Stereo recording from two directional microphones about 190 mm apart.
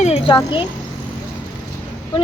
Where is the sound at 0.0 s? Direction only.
35° left (ahead or behind).